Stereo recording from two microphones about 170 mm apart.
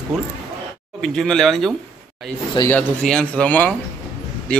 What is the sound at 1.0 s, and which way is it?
Speech, 5° left (ahead or behind).